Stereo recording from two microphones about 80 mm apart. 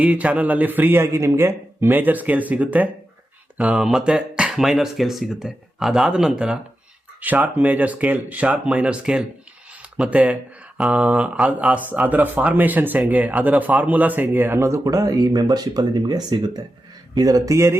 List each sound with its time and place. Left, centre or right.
0.0 s speech: centre
1.0 s speech: right; by 11.8 s centre
11.9 s speech: centre; by 16.6 s right
17.2 s speech: right